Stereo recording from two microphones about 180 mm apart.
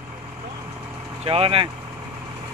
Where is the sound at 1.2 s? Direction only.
30° right (ahead or behind).